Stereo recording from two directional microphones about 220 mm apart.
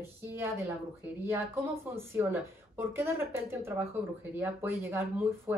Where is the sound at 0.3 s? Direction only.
15° right (ahead or behind).